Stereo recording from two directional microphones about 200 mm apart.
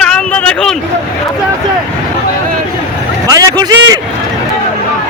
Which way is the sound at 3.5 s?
20° right (ahead or behind).